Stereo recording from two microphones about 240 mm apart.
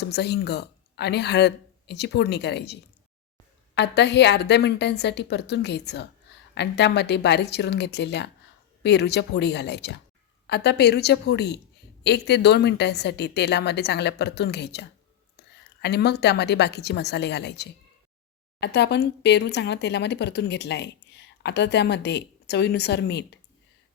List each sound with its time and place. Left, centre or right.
0.0 s speech: left
3.8 s a woman's voice: left